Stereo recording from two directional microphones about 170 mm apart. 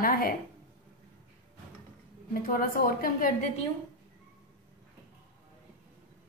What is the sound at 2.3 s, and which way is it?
A woman's voice, 55° left (ahead or behind).